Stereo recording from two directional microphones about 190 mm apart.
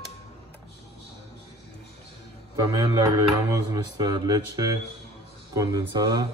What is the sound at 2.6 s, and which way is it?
Speech, 20° right (ahead or behind).